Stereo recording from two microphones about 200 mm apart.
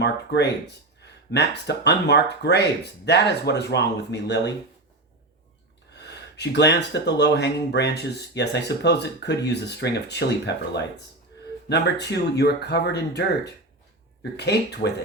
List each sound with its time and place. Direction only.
0.0 s speech: 55° left (ahead or behind)
5.9 s speech: 60° left (ahead or behind)
11.7 s speech: 55° left (ahead or behind)